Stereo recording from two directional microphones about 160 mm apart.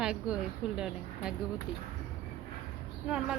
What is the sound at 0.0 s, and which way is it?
Speech, 5° right (ahead or behind).